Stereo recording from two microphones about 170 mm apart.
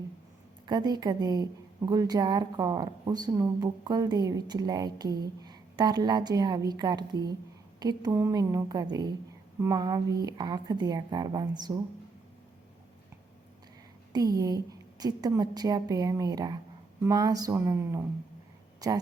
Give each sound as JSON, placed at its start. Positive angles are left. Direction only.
{"t": 0.7, "sound": "a woman's voice", "side_deg": -25}
{"t": 14.1, "sound": "a woman's voice", "side_deg": -20}